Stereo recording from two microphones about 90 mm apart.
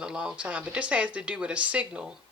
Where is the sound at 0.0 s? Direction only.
10° right (ahead or behind).